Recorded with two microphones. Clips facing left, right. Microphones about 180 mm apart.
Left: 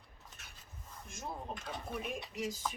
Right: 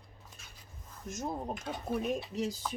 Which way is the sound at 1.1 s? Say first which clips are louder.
Right 7 dB; 40° right (ahead or behind).